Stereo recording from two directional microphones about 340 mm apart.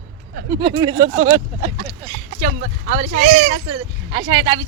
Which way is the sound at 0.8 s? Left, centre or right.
Centre.